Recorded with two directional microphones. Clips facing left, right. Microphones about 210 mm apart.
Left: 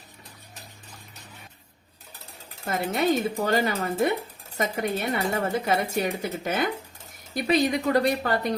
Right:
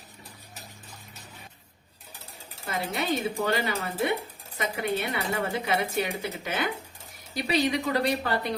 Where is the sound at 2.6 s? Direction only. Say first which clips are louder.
Left 6 dB; 45° left (ahead or behind).